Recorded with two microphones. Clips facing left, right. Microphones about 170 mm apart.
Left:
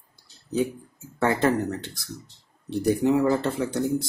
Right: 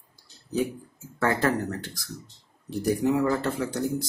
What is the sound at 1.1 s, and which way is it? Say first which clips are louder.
Speech: left 2 dB; 25° left (ahead or behind).